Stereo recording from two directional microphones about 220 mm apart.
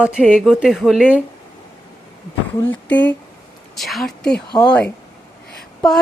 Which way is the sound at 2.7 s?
5° left (ahead or behind).